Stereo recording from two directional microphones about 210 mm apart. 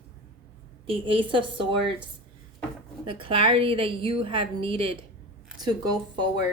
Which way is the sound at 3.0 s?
25° right (ahead or behind).